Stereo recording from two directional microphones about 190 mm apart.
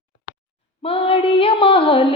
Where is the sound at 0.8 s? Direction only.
30° left (ahead or behind).